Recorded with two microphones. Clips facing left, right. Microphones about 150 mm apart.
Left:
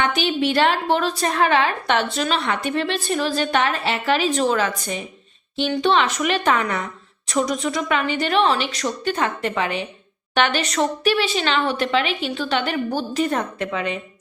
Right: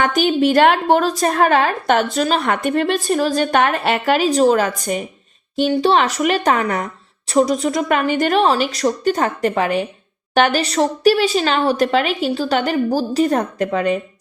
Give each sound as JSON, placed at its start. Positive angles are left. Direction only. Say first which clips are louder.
{"t": 0.0, "sound": "a woman's voice", "louder": "right 5 dB", "side_deg": -45}